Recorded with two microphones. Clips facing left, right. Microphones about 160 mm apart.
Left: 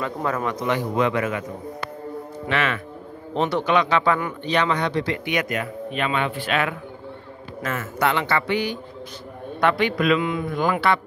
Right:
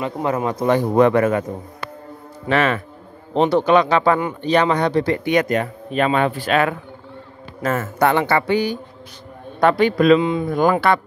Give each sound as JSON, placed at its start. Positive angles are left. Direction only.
{"t": 0.0, "sound": "speech", "side_deg": -25}
{"t": 0.7, "sound": "speech", "side_deg": -45}
{"t": 2.4, "sound": "speech", "side_deg": -40}